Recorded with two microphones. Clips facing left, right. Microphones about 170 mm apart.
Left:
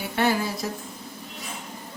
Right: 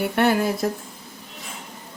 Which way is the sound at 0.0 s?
60° right (ahead or behind).